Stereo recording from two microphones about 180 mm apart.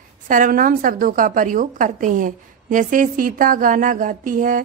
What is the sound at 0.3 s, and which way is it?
A woman's voice, 50° right (ahead or behind).